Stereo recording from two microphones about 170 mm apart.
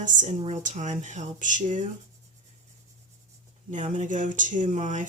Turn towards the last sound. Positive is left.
turn(degrees=-45)  # may be behind; listen again after turning